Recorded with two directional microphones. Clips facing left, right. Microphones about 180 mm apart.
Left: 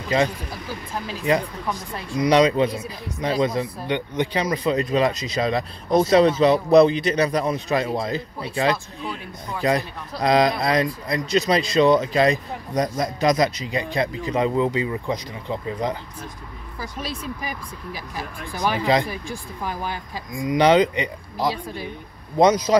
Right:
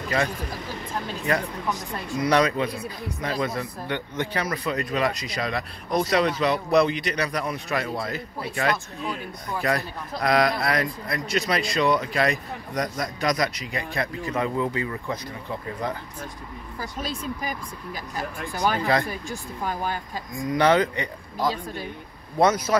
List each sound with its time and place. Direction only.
2.0 s speech: 20° left (ahead or behind)
18.8 s speech: 15° left (ahead or behind)
20.3 s speech: 15° left (ahead or behind)